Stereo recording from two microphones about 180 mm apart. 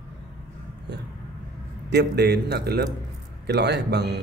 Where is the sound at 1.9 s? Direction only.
65° right (ahead or behind).